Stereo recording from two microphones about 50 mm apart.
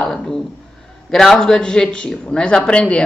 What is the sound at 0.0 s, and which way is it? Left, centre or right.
A woman's voice, centre.